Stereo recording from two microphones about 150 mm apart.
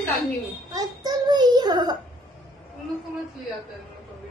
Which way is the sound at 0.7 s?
25° right (ahead or behind).